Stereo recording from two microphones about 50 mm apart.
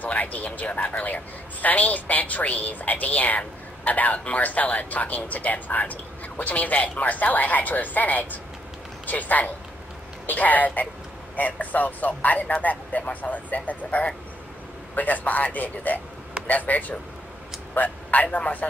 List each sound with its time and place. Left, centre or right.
0.0 s a woman's voice: left